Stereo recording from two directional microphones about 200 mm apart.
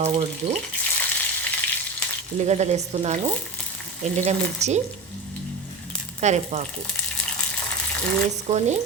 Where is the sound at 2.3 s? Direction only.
35° right (ahead or behind).